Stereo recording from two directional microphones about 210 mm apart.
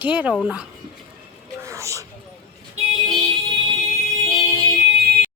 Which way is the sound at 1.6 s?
15° right (ahead or behind).